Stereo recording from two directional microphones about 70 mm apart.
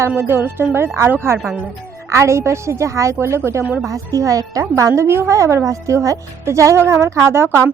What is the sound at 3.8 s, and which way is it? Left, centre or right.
A woman's voice, right.